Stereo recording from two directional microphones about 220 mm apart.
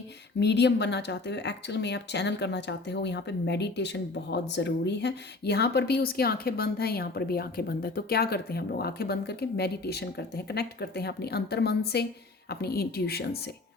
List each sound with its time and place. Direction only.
0.3 s speech: 50° left (ahead or behind)